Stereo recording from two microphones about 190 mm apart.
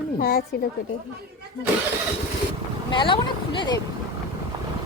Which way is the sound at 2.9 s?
25° left (ahead or behind).